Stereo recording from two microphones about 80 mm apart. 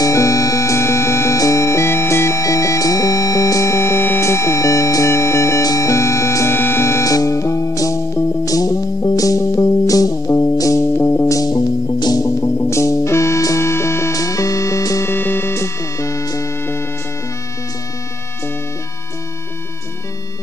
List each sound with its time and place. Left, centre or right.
0.0 s music: left
7.1 s music: left
11.3 s music: left
15.0 s music: left